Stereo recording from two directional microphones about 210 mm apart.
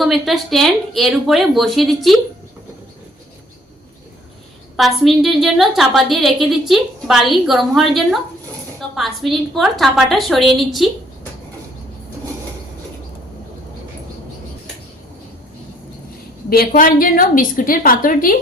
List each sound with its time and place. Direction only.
0.0 s a woman's voice: centre (ahead or behind)
4.8 s a woman's voice: centre (ahead or behind)
16.5 s a woman's voice: 45° left (ahead or behind)